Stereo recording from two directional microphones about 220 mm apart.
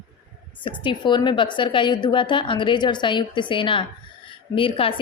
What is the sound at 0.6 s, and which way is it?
A woman's voice, 20° left (ahead or behind).